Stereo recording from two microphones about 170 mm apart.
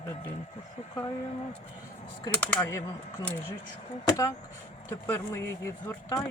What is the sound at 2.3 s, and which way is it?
Speech, 10° left (ahead or behind).